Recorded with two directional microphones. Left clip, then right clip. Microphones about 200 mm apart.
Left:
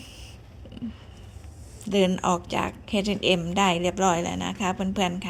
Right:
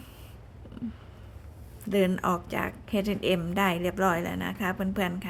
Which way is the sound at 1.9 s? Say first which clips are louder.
Left 3 dB; 10° right (ahead or behind).